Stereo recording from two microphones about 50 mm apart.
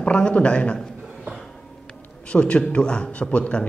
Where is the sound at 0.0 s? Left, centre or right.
Left.